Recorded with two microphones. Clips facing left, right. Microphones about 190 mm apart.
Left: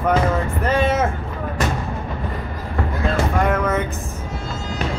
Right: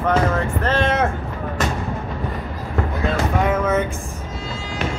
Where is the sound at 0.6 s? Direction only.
10° left (ahead or behind).